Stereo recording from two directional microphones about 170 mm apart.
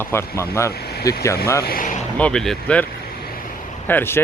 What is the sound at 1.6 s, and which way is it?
Speech, 60° left (ahead or behind).